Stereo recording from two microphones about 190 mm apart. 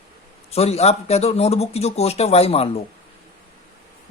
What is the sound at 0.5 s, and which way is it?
Speech, 35° left (ahead or behind).